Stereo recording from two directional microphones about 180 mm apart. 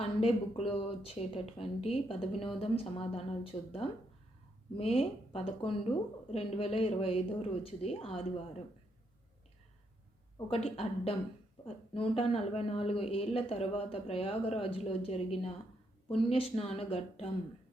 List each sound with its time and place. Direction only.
0.0 s speech: 35° left (ahead or behind)
10.5 s speech: 35° left (ahead or behind)